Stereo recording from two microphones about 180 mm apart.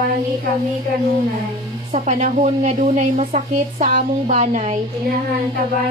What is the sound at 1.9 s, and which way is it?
A woman's voice, 40° right (ahead or behind).